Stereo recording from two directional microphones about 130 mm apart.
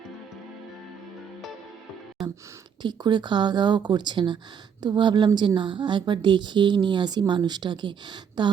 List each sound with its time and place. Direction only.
2.8 s a woman's voice: 35° right (ahead or behind)